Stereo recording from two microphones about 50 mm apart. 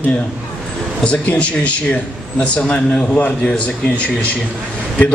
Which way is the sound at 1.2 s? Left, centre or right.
Left.